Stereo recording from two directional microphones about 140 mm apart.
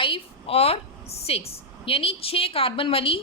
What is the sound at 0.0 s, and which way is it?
A woman's voice, 40° left (ahead or behind).